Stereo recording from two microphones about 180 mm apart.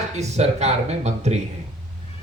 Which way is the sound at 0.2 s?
40° right (ahead or behind).